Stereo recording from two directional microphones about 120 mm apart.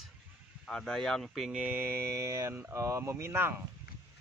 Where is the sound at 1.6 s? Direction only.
15° right (ahead or behind).